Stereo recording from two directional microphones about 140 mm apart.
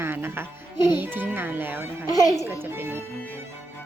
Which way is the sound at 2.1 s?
25° left (ahead or behind).